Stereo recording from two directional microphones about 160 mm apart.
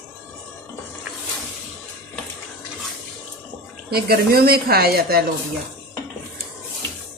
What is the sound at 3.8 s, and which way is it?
A woman's voice, 75° right (ahead or behind).